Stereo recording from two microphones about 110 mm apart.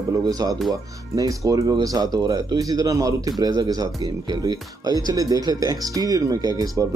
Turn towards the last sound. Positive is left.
turn(degrees=-35)  # may be behind; listen again after turning